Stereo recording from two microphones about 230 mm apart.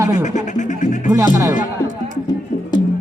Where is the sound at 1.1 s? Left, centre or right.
Centre.